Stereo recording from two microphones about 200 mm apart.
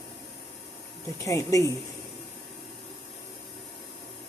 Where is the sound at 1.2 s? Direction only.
15° left (ahead or behind).